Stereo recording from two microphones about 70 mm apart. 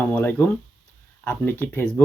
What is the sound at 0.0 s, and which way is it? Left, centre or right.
Speech, left.